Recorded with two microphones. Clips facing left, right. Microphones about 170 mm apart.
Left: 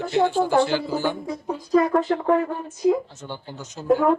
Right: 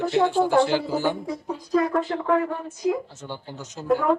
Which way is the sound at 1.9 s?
40° left (ahead or behind).